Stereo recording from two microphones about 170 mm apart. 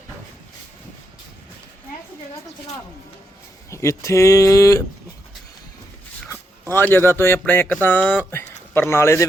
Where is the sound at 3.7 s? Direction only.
15° left (ahead or behind).